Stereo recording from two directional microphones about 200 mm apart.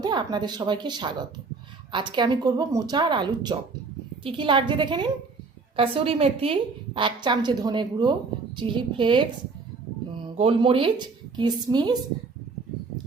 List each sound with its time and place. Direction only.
0.0 s a woman's voice: 20° right (ahead or behind)